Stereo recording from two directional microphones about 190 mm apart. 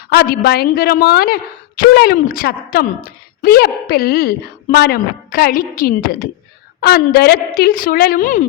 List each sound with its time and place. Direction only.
0.1 s a woman's voice: 55° left (ahead or behind)